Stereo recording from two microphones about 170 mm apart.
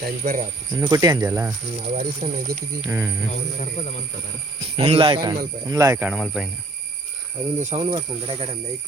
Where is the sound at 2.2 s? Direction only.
50° right (ahead or behind).